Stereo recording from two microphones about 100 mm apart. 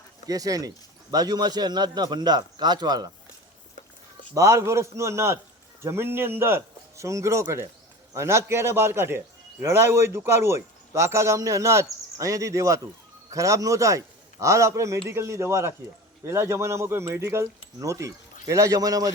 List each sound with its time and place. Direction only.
0.3 s a man's voice: 35° right (ahead or behind)
4.4 s a man's voice: 30° right (ahead or behind)